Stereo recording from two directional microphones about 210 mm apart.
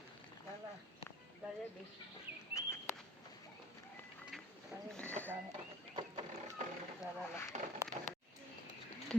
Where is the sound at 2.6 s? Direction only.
15° left (ahead or behind).